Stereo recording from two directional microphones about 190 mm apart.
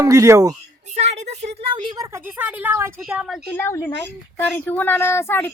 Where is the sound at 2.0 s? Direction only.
10° right (ahead or behind).